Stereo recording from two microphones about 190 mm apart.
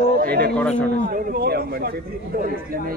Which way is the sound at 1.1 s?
50° right (ahead or behind).